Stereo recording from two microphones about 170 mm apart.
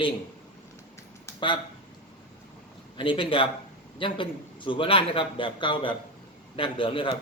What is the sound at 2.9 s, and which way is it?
A man's voice, 30° left (ahead or behind).